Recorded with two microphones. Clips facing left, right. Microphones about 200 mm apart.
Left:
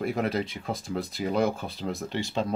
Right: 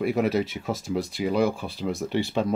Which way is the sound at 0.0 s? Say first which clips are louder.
Right 4 dB; centre (ahead or behind).